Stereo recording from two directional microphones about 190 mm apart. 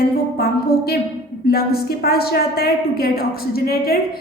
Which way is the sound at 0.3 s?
55° left (ahead or behind).